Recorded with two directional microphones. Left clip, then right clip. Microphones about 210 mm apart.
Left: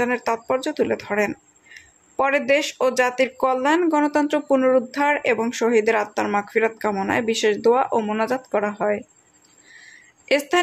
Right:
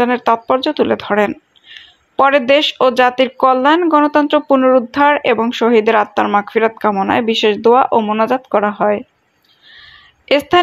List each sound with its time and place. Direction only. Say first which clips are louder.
0.0 s speech: right 9 dB; 20° right (ahead or behind)